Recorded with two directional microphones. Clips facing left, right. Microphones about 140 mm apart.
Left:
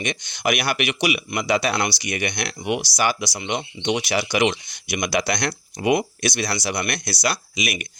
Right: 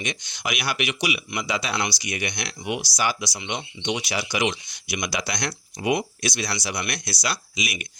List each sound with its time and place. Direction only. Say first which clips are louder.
0.0 s speech: left 6 dB; 60° left (ahead or behind)